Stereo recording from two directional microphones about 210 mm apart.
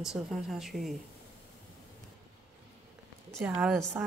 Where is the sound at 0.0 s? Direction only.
Centre (ahead or behind).